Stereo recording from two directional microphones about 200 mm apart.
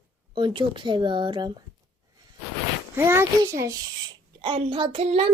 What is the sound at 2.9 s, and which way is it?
A child's voice, 10° right (ahead or behind).